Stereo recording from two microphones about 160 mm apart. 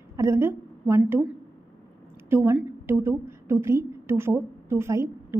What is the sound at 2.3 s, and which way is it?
A woman's voice, 15° right (ahead or behind).